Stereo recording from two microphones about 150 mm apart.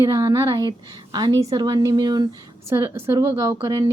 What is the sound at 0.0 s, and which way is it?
Speech, 25° right (ahead or behind).